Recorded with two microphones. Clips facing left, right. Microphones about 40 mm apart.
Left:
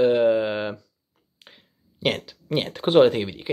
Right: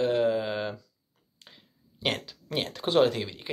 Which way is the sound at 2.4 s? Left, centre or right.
Centre.